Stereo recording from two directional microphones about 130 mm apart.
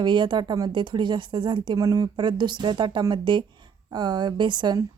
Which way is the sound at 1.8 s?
25° right (ahead or behind).